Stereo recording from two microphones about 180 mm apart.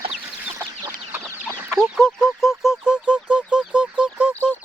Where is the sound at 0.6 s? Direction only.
20° right (ahead or behind).